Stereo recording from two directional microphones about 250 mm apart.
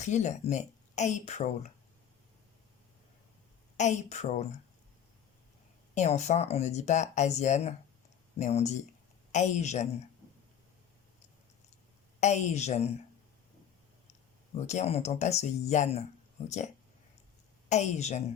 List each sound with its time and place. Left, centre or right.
0.0 s speech: left
3.8 s speech: left
5.9 s speech: left
12.2 s speech: left
14.5 s speech: left
17.7 s speech: left